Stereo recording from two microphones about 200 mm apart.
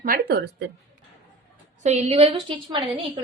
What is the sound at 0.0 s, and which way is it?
Speech, 50° right (ahead or behind).